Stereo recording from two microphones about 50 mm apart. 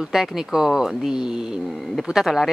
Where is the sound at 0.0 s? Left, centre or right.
Centre.